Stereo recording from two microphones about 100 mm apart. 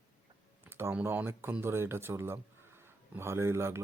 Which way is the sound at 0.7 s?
25° right (ahead or behind).